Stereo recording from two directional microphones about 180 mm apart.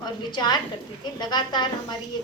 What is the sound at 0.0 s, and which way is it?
A woman's voice, 25° left (ahead or behind).